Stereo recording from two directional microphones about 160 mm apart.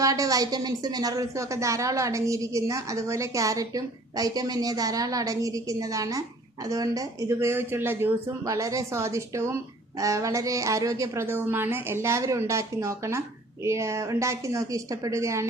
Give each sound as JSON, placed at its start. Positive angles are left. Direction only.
{"t": 0.0, "sound": "a woman's voice", "side_deg": -20}